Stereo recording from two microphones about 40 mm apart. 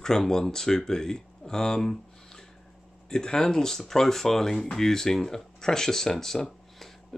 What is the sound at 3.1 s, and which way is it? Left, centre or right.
Speech, centre.